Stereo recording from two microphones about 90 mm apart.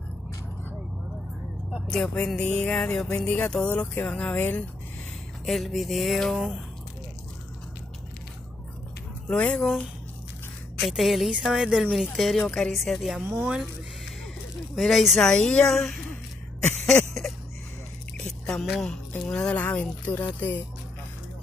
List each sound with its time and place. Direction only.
1.9 s speech: 5° left (ahead or behind)
5.4 s a woman's voice: centre (ahead or behind)
9.3 s speech: 10° left (ahead or behind)
10.9 s a woman's voice: centre (ahead or behind)
14.8 s a woman's voice: centre (ahead or behind)
16.8 s a sound: 5° left (ahead or behind)
18.2 s rodents: 5° left (ahead or behind)
19.2 s speech: 10° left (ahead or behind)